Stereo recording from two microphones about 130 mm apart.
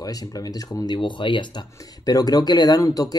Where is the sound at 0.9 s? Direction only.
40° left (ahead or behind).